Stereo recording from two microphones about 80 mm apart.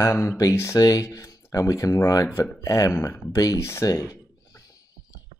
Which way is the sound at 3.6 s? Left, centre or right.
Left.